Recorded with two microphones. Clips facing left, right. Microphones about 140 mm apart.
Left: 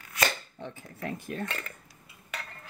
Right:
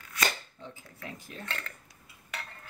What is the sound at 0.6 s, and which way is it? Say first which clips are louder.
Speech: left 6 dB; 60° left (ahead or behind).